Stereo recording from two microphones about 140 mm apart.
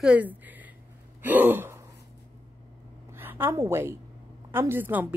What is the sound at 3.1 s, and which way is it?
A woman's voice, 15° right (ahead or behind).